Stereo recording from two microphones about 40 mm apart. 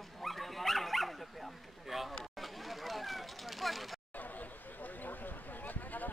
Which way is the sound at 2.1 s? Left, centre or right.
Centre.